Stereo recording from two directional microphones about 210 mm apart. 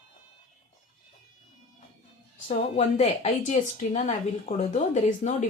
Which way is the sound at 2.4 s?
30° left (ahead or behind).